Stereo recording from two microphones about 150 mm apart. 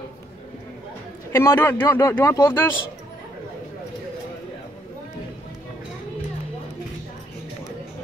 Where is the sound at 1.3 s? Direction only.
15° left (ahead or behind).